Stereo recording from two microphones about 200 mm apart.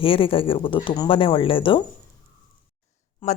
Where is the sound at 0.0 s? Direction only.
25° left (ahead or behind).